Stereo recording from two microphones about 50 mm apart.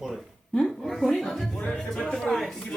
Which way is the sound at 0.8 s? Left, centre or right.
Centre.